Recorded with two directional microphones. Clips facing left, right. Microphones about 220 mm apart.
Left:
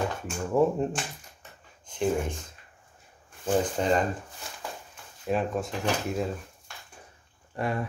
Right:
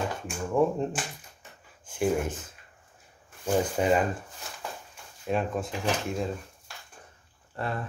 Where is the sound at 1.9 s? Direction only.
10° right (ahead or behind).